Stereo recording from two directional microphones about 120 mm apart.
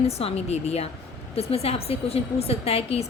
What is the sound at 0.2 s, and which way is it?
A woman's voice, 60° left (ahead or behind).